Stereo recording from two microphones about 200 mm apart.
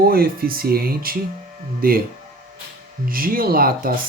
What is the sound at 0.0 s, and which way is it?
Speech, 50° right (ahead or behind).